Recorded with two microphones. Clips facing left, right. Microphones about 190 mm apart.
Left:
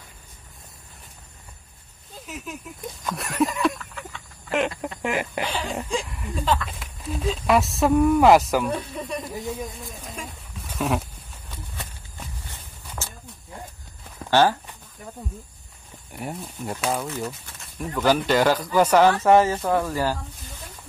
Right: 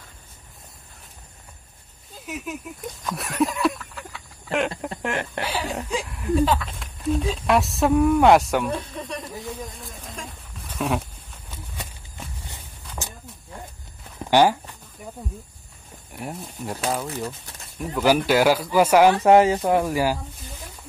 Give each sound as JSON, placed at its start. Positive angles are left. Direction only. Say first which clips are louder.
{"t": 2.2, "sound": "speech", "louder": "right 4 dB", "side_deg": 0}
{"t": 5.4, "sound": "speech", "louder": "even", "side_deg": -5}
{"t": 9.5, "sound": "a sound", "louder": "left 3 dB", "side_deg": 0}
{"t": 12.4, "sound": "walk", "louder": "right 1 dB", "side_deg": -15}
{"t": 14.3, "sound": "speech", "louder": "right 2 dB", "side_deg": -15}
{"t": 16.1, "sound": "speech", "louder": "left 1 dB", "side_deg": 0}